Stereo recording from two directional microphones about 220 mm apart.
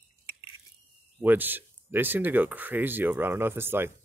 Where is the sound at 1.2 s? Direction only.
10° right (ahead or behind).